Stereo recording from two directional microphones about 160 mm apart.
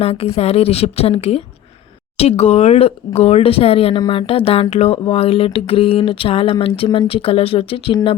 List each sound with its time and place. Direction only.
0.0 s speech: 40° left (ahead or behind)